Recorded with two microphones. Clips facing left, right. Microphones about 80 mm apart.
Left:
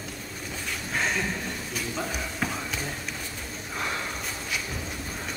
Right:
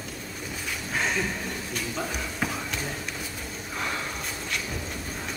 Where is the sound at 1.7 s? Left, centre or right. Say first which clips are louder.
Even; centre.